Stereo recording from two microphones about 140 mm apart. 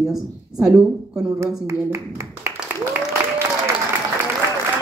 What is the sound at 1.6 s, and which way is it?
Speech, 20° right (ahead or behind).